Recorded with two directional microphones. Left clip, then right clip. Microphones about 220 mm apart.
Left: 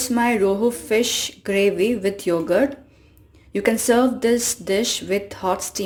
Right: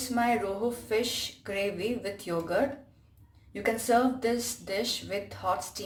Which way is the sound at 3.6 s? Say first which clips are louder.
Left 7 dB; 35° left (ahead or behind).